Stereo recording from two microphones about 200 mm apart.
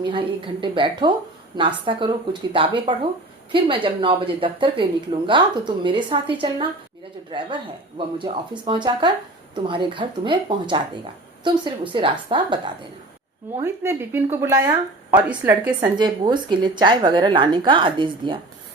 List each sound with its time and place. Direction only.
0.0 s speech: 25° right (ahead or behind)
13.6 s speech: 10° right (ahead or behind)
15.6 s speech: 20° right (ahead or behind)